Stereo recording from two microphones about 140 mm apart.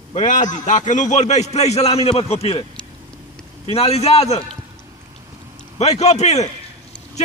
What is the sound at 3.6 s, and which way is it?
Speech, 45° left (ahead or behind).